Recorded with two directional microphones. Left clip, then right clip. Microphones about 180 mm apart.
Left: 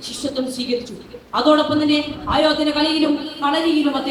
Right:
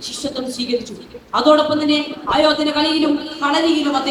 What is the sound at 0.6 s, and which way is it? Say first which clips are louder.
A woman's voice: right 2 dB; 40° right (ahead or behind).